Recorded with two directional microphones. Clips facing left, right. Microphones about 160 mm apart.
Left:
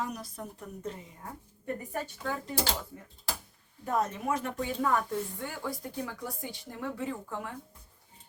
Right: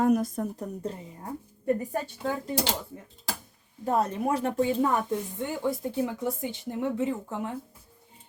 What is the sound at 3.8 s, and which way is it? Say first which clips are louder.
Speech: right 4 dB; 30° right (ahead or behind).